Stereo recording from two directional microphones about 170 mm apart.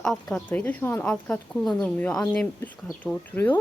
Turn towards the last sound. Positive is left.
turn(degrees=10)  # may be behind; listen again after turning